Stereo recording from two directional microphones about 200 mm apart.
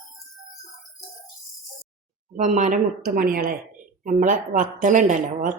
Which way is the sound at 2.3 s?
40° right (ahead or behind).